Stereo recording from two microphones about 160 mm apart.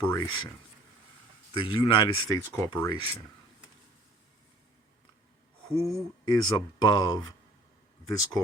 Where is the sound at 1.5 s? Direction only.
30° left (ahead or behind).